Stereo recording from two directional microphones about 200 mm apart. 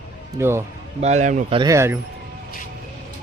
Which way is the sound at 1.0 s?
35° right (ahead or behind).